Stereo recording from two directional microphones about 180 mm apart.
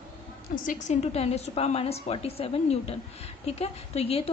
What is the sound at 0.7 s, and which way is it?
A woman's voice, 40° left (ahead or behind).